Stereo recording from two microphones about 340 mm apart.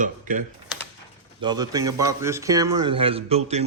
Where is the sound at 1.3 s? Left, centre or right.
Centre.